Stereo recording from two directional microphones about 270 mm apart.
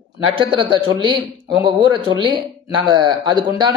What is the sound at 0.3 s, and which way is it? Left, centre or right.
Speech, centre.